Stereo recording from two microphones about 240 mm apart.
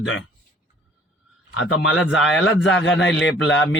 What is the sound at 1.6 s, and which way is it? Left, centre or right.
A man's voice, left.